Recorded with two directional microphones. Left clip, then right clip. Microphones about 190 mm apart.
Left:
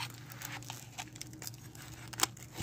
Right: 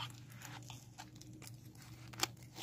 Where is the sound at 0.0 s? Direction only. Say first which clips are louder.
Left 5 dB; 35° left (ahead or behind).